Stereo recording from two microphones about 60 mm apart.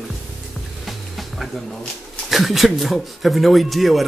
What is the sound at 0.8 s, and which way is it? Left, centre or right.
Music, centre.